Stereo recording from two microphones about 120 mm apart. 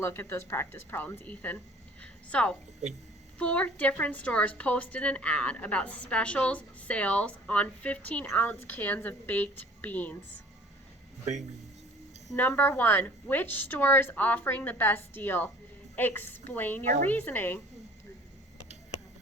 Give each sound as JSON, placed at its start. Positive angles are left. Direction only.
{"t": 0.0, "sound": "a woman's voice", "side_deg": 20}
{"t": 12.4, "sound": "a woman's voice", "side_deg": 15}